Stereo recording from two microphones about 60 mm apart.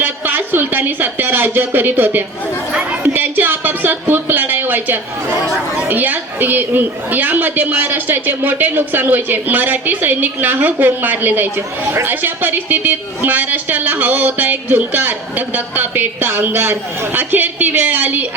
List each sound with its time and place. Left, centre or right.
0.0 s a woman's voice: right
3.0 s a sound: right
5.9 s a woman's voice: right